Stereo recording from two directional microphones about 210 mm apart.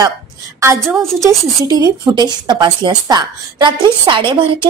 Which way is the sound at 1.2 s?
15° right (ahead or behind).